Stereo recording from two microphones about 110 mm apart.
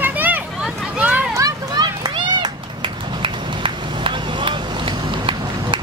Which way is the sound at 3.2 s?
55° right (ahead or behind).